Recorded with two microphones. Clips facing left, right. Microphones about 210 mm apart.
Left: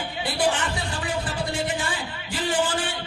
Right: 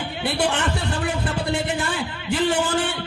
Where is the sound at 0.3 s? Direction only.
65° right (ahead or behind).